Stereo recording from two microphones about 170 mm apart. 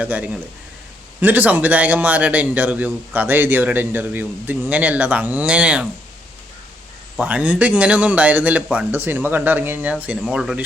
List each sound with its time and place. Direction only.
0.0 s a man's voice: 10° right (ahead or behind)
7.2 s a man's voice: 10° right (ahead or behind)